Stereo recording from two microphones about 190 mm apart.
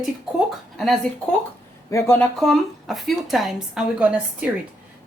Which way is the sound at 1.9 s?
15° left (ahead or behind).